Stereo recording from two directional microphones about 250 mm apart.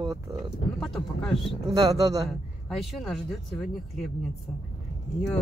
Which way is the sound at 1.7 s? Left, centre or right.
Centre.